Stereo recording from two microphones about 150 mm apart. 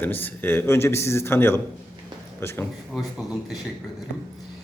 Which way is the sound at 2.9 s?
Centre (ahead or behind).